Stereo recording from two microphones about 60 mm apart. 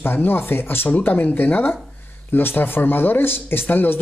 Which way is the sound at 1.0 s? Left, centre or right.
Left.